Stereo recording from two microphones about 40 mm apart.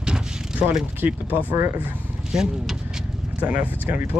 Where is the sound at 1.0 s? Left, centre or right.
Right.